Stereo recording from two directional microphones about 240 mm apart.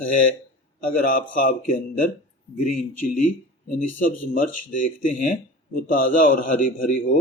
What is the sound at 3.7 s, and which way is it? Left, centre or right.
Speech, left.